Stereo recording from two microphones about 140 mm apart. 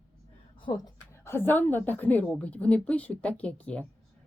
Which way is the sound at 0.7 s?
25° left (ahead or behind).